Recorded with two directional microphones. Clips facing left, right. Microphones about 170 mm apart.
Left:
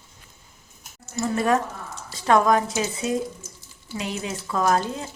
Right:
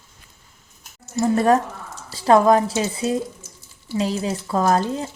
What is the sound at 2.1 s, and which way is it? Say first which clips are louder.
Speech: right 4 dB; 30° right (ahead or behind).